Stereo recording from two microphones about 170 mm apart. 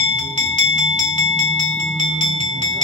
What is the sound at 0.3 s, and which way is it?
Bell, 45° right (ahead or behind).